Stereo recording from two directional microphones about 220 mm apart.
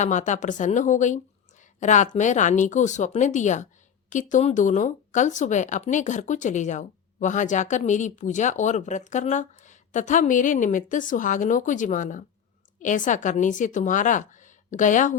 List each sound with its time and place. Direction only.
0.0 s speech: 35° left (ahead or behind)